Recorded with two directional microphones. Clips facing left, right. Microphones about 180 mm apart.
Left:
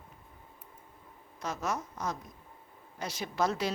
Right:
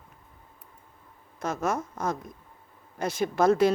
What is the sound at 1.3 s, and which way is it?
Speech, 50° right (ahead or behind).